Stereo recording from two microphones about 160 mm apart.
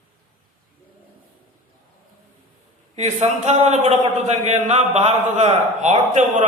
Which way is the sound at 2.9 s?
40° right (ahead or behind).